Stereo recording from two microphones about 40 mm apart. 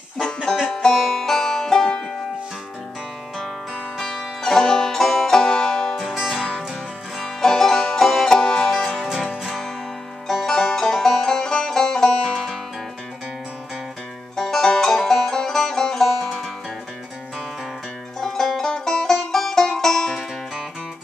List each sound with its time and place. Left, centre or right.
0.9 s music: centre
4.0 s music: centre
5.9 s music: centre
6.3 s music: left
7.4 s music: centre
9.4 s music: centre
14.3 s music: centre
18.2 s music: centre